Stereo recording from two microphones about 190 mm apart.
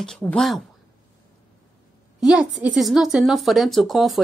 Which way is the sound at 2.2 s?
5° right (ahead or behind).